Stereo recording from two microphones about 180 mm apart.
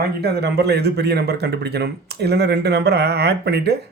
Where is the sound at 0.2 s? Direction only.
65° right (ahead or behind).